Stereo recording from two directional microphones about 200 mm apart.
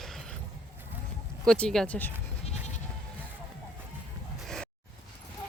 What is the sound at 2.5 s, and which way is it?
Bleat, 35° left (ahead or behind).